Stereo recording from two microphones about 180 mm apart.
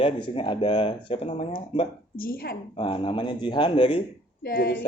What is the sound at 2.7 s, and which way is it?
Speech, 30° left (ahead or behind).